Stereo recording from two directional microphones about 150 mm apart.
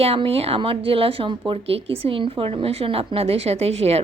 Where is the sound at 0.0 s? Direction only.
40° right (ahead or behind).